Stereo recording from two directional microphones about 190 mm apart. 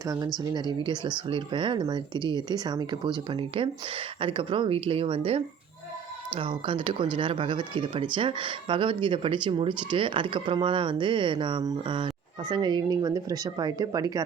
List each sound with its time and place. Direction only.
0.5 s speech: 25° right (ahead or behind)